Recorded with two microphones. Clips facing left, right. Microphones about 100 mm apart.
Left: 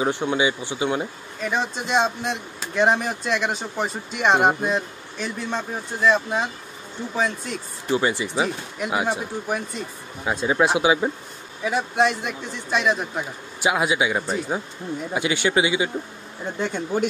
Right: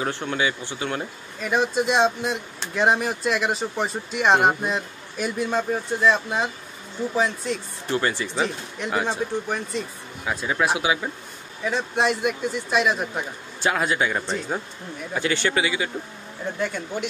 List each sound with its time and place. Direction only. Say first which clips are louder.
0.0 s speech: left 4 dB; 15° left (ahead or behind)
1.4 s speech: right 3 dB; 5° right (ahead or behind)
7.9 s speech: left 2 dB; 15° left (ahead or behind)
10.2 s speech: left 3 dB; 20° left (ahead or behind)
11.6 s speech: left 2 dB; 5° left (ahead or behind)
13.6 s speech: left 2 dB; 15° left (ahead or behind)